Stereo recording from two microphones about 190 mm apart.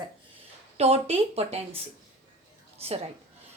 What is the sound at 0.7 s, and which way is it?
Speech, 35° right (ahead or behind).